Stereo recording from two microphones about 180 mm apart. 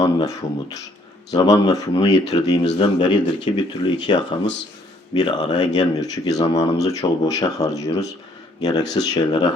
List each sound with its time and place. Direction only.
0.0 s speech: 20° left (ahead or behind)